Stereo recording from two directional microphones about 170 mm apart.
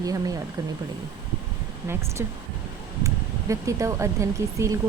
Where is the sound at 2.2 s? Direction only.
15° right (ahead or behind).